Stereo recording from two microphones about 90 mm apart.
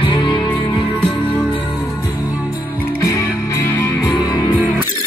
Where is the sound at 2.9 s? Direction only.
35° left (ahead or behind).